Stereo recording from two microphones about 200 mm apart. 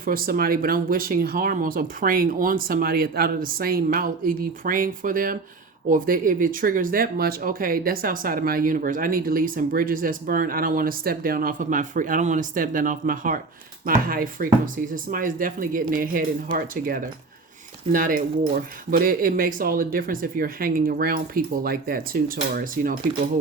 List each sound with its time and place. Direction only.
0.0 s speech: 45° right (ahead or behind)